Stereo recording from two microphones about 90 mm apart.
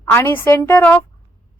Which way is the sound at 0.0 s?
25° left (ahead or behind).